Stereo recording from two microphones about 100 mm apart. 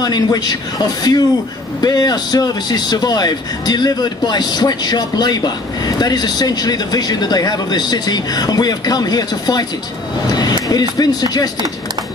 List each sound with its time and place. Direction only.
0.0 s speech: 40° left (ahead or behind)